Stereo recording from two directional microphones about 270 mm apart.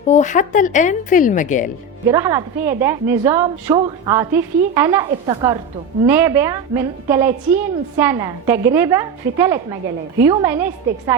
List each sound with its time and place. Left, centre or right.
0.1 s speech: left
2.0 s a woman's voice: centre